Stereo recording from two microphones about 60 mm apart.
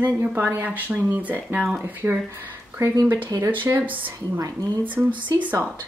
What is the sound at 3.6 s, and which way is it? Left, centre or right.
Speech, right.